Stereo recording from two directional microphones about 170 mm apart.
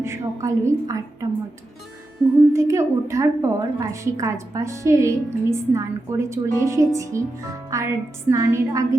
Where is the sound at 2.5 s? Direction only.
15° right (ahead or behind).